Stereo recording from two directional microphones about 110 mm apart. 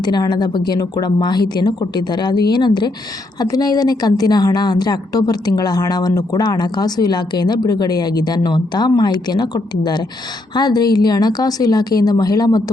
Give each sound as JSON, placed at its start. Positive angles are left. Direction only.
{"t": 0.0, "sound": "a woman's voice", "side_deg": 40}